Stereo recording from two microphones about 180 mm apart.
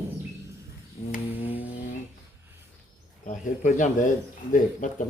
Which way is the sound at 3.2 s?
45° left (ahead or behind).